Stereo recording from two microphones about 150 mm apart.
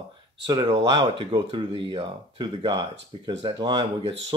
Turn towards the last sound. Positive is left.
turn(degrees=-30)  # may be behind; listen again after turning